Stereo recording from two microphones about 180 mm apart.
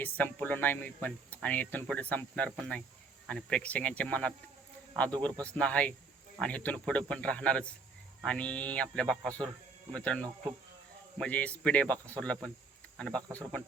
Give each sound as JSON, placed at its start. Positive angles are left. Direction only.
{"t": 0.0, "sound": "speech", "side_deg": 10}